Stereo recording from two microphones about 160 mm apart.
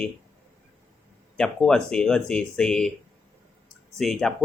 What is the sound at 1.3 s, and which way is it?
Speech, 5° left (ahead or behind).